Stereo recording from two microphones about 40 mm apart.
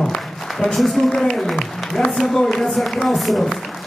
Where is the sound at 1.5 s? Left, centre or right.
Left.